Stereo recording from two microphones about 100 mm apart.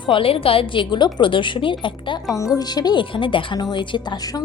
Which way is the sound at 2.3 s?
35° left (ahead or behind).